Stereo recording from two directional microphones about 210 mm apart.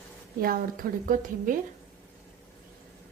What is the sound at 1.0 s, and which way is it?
Speech, 40° right (ahead or behind).